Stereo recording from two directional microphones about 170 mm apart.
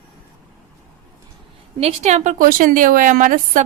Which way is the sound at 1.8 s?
40° right (ahead or behind).